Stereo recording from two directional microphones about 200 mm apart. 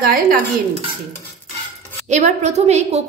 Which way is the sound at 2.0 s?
35° right (ahead or behind).